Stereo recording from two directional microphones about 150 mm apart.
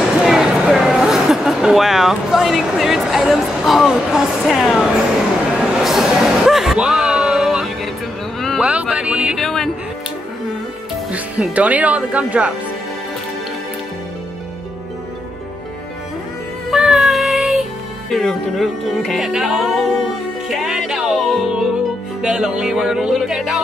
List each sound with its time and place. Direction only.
0.2 s speech: centre (ahead or behind)
5.6 s a sound: centre (ahead or behind)
8.6 s music: 10° right (ahead or behind)
11.1 s speech: 10° right (ahead or behind)
16.7 s music: 5° right (ahead or behind)